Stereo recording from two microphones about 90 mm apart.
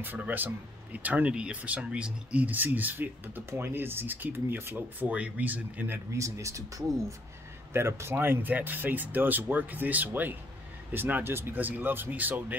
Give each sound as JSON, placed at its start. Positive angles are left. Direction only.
{"t": 0.0, "sound": "speech", "side_deg": -20}
{"t": 6.1, "sound": "speech", "side_deg": -35}
{"t": 7.7, "sound": "speech", "side_deg": -30}